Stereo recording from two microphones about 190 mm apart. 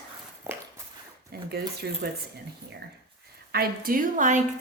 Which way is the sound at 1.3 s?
55° right (ahead or behind).